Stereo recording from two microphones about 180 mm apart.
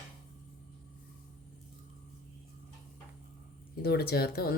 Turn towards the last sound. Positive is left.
turn(degrees=60)  # may be behind; listen again after turning